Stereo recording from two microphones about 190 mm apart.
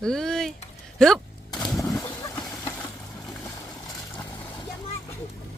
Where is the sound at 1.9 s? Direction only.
15° left (ahead or behind).